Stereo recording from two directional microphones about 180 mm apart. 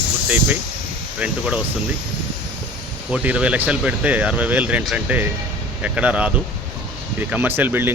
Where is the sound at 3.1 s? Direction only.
5° right (ahead or behind).